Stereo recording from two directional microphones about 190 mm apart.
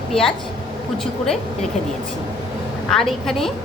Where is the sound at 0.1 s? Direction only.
5° left (ahead or behind).